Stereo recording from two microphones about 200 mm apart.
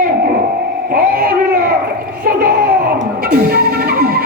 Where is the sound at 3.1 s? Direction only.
50° right (ahead or behind).